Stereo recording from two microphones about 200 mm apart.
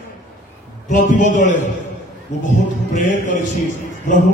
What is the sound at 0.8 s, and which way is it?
Speech, 40° left (ahead or behind).